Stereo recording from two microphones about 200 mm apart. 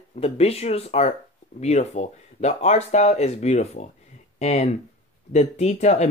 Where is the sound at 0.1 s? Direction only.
30° left (ahead or behind).